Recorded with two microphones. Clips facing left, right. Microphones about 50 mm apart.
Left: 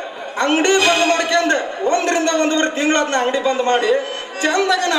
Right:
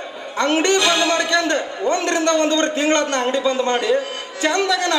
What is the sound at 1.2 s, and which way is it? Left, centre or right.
A man's voice, left.